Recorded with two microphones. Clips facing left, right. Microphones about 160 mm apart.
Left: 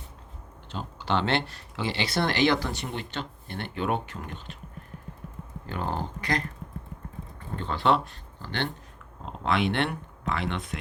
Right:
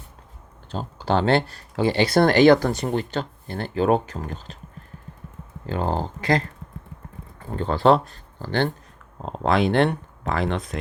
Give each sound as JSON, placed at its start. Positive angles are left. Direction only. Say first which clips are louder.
{"t": 0.7, "sound": "speech", "louder": "right 5 dB", "side_deg": -35}
{"t": 5.6, "sound": "speech", "louder": "right 6 dB", "side_deg": -30}
{"t": 7.5, "sound": "speech", "louder": "right 7 dB", "side_deg": -40}